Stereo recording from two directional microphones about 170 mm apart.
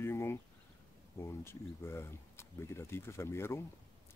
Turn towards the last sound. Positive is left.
turn(degrees=15)  # may be behind; listen again after turning